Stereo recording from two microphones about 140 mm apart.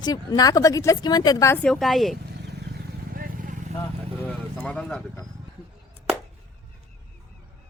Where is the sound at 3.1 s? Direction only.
80° right.